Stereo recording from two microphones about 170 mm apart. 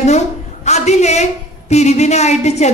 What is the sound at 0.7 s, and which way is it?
A woman's voice, 40° left (ahead or behind).